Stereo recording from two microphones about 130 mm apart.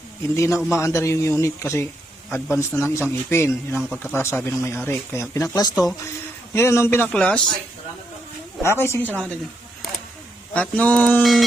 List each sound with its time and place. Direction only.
0.3 s a man's voice: 20° left (ahead or behind)
8.6 s a man's voice: 20° left (ahead or behind)
10.5 s a man's voice: 10° left (ahead or behind)